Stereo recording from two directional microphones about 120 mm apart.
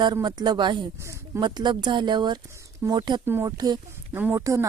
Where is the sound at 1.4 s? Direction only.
40° right (ahead or behind).